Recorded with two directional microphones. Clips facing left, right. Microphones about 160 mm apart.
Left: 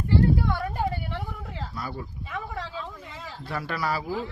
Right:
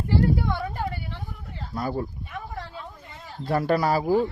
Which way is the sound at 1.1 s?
85° left.